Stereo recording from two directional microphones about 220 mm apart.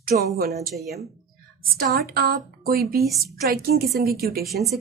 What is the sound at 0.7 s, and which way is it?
Speech, centre (ahead or behind).